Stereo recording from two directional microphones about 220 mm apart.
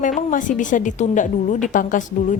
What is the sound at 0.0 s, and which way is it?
A woman's voice, 35° left (ahead or behind).